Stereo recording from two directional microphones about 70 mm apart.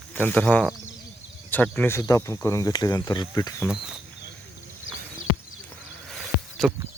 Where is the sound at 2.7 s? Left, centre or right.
Left.